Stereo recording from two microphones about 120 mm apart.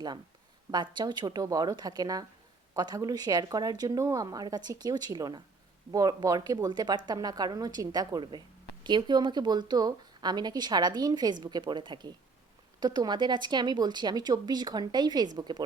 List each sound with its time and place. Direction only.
0.7 s speech: 35° right (ahead or behind)